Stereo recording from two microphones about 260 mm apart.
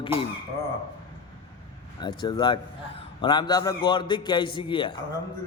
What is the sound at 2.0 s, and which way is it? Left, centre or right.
A man's voice, centre.